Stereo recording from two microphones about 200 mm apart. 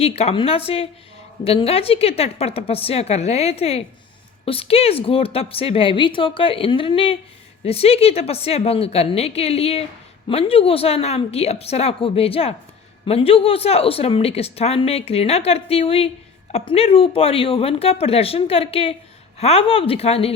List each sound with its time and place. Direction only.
0.0 s a woman's voice: 30° left (ahead or behind)